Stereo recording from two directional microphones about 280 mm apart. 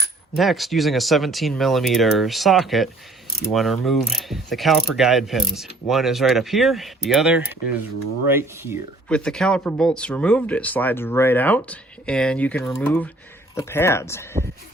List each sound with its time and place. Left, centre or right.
0.3 s speech: centre
7.6 s mechanisms: left
8.3 s speech: centre
9.0 s speech: centre